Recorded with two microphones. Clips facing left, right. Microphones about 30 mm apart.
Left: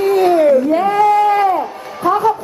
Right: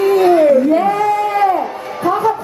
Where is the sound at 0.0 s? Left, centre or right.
Centre.